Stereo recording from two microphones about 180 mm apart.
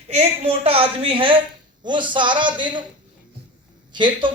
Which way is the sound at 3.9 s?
25° right (ahead or behind).